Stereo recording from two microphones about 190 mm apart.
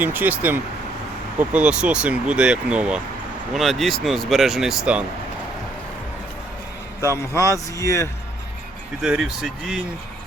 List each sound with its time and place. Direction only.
0.0 s speech: 10° right (ahead or behind)
7.0 s a man's voice: 15° left (ahead or behind)
9.0 s speech: 5° right (ahead or behind)